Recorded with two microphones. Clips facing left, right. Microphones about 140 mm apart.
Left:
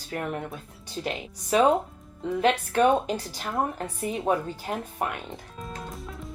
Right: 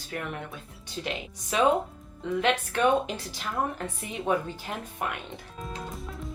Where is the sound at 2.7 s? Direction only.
40° left (ahead or behind).